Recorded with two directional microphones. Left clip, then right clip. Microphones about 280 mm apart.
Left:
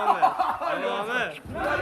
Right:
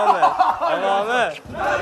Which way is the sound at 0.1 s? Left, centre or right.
Right.